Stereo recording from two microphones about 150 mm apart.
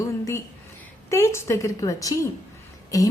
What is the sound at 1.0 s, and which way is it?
A woman's voice, 20° left (ahead or behind).